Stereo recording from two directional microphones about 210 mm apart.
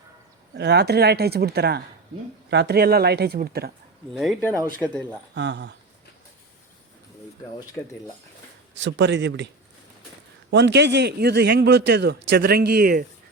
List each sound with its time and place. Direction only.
0.5 s a man's voice: 55° right (ahead or behind)
4.1 s speech: centre (ahead or behind)
5.3 s speech: 55° right (ahead or behind)
8.7 s speech: 60° right (ahead or behind)
10.5 s a man's voice: 55° right (ahead or behind)